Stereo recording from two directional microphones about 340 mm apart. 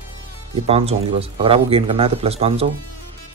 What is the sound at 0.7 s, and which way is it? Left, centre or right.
Speech, centre.